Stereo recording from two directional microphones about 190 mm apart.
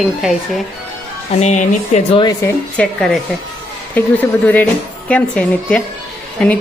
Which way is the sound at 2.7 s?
5° left (ahead or behind).